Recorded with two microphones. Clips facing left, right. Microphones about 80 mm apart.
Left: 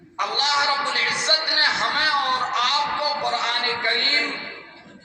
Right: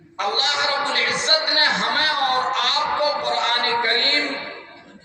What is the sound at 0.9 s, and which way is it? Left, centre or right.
Music, right.